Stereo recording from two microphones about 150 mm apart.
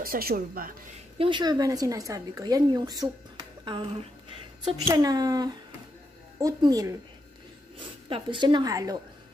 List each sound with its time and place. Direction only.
0.0 s a woman's voice: 80° right
1.1 s a woman's voice: 35° right (ahead or behind)
4.9 s a woman's voice: 25° right (ahead or behind)